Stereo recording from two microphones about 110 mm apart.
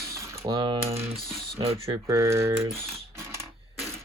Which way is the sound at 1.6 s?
55° right (ahead or behind).